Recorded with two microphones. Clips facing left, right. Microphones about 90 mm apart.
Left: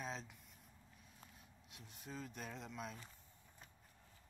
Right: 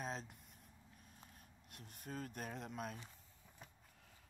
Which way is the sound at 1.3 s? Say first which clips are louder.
Right 1 dB; 50° right (ahead or behind).